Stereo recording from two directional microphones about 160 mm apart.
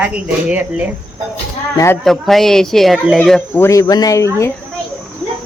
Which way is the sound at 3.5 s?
20° left (ahead or behind).